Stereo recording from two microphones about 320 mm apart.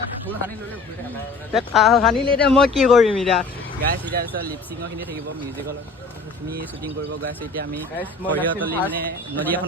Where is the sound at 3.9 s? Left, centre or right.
Right.